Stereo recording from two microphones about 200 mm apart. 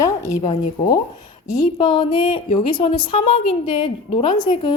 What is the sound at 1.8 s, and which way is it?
A woman's voice, 25° left (ahead or behind).